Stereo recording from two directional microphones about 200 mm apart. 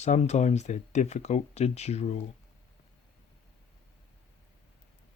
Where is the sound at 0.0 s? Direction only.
35° left (ahead or behind).